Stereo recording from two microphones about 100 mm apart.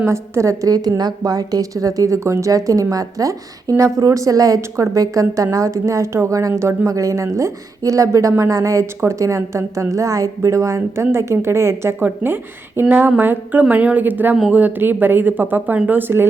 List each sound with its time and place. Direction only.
0.1 s a woman's voice: 30° right (ahead or behind)